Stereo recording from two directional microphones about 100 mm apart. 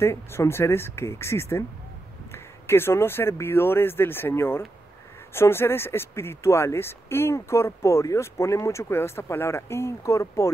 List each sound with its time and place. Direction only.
0.0 s speech: 25° left (ahead or behind)